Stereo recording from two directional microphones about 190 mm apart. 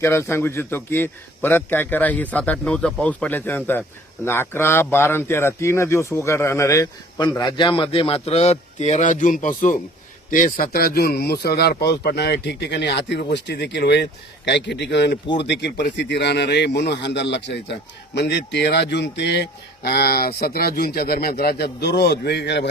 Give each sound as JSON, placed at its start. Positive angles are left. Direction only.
{"t": 0.0, "sound": "a man's voice", "side_deg": 15}